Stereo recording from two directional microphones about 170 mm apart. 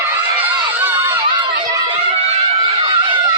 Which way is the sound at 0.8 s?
20° right (ahead or behind).